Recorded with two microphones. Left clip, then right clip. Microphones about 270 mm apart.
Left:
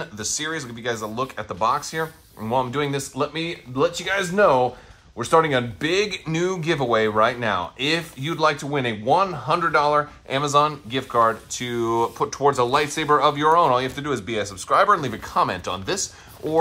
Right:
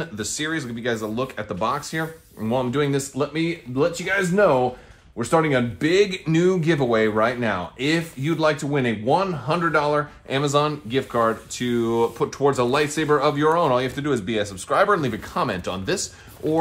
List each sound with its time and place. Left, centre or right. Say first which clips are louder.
0.0 s speech: even; left